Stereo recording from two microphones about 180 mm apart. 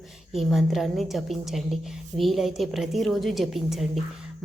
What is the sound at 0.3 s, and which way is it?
A woman's voice, centre (ahead or behind).